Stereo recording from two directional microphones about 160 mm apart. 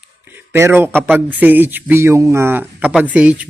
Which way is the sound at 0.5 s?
15° right (ahead or behind).